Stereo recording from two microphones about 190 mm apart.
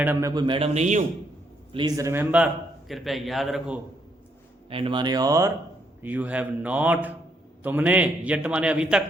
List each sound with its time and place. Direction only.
0.0 s a man's voice: 15° right (ahead or behind); by 1.0 s 40° right (ahead or behind)
1.7 s a man's voice: 20° right (ahead or behind); by 3.8 s centre (ahead or behind)
4.7 s a man's voice: 25° right (ahead or behind); by 9.0 s 5° right (ahead or behind)